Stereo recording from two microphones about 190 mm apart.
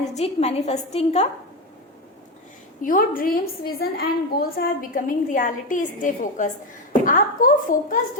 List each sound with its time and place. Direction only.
0.1 s a woman's voice: 35° left (ahead or behind)
2.8 s a woman's voice: 50° left (ahead or behind)